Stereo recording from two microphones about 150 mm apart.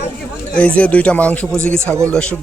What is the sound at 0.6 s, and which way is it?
Speech, 10° left (ahead or behind).